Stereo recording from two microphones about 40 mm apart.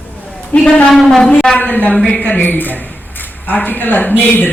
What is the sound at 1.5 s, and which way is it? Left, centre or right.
A man's voice, left.